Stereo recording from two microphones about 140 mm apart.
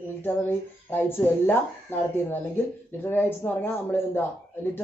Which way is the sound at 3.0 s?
15° left (ahead or behind).